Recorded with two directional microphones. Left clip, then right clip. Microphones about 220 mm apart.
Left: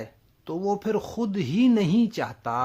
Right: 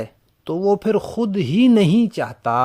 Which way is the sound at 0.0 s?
30° right (ahead or behind).